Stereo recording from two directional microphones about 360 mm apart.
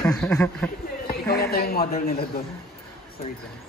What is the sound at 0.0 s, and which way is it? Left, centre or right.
Speech, centre.